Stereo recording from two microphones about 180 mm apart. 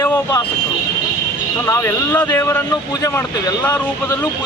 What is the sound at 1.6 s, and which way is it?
Speech, 15° left (ahead or behind).